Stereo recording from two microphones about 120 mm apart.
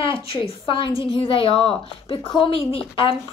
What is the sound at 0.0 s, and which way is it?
A woman's voice, 45° left (ahead or behind).